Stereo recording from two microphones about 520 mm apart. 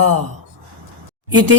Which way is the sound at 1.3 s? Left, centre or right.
Right.